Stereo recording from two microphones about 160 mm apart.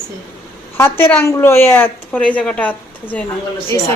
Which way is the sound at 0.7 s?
15° left (ahead or behind).